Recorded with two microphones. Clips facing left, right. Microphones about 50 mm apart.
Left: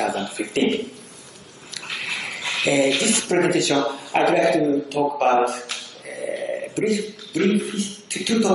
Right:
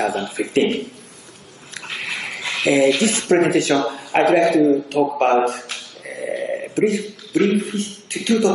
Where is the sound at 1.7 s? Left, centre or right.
Right.